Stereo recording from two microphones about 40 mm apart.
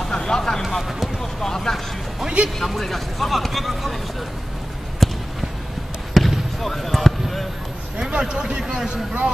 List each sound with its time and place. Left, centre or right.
0.0 s vehicle: centre
0.6 s speech: centre
1.4 s vehicle: centre
2.2 s music: right
2.6 s speech: centre
5.0 s basketball bounce: centre
8.0 s a man's voice: centre